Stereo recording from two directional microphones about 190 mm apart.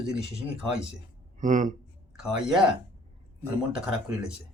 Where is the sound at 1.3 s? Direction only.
40° right (ahead or behind).